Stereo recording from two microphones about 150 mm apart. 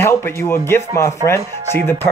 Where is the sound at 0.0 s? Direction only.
15° left (ahead or behind).